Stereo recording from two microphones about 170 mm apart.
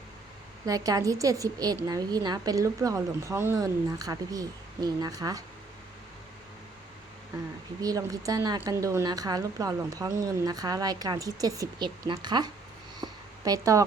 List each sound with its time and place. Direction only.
0.6 s a woman's voice: 20° right (ahead or behind)
7.8 s a woman's voice: 20° right (ahead or behind)
13.0 s a sound: 20° right (ahead or behind)